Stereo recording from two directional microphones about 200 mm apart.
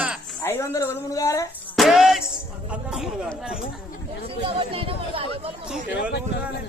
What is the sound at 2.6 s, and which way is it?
Speech, 5° right (ahead or behind).